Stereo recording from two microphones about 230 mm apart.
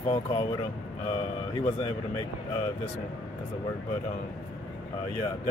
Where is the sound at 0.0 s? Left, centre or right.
Left.